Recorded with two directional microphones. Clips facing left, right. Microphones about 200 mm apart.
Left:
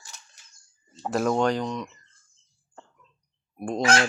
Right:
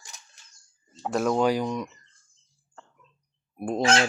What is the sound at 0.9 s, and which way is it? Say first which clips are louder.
Speech: even; centre (ahead or behind).